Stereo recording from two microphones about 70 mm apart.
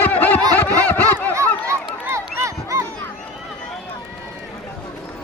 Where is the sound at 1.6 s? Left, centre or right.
Right.